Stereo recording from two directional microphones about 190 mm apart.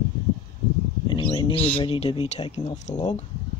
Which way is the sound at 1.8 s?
30° left (ahead or behind).